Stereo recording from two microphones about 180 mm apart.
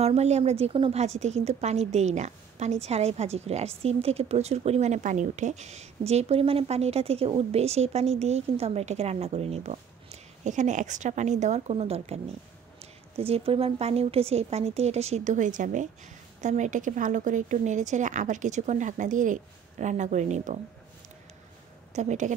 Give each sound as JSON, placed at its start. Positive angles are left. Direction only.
{"t": 0.0, "sound": "a woman's voice", "side_deg": -35}
{"t": 21.9, "sound": "a woman's voice", "side_deg": -40}